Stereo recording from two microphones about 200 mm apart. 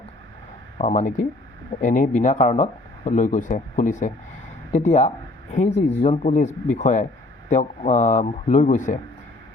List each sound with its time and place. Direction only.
0.8 s speech: 35° left (ahead or behind)